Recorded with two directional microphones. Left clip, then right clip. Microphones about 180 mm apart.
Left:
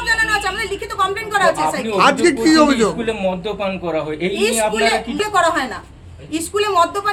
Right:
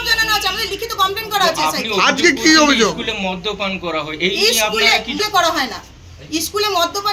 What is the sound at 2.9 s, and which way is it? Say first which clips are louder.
A man's voice: left 2 dB; 55° left (ahead or behind).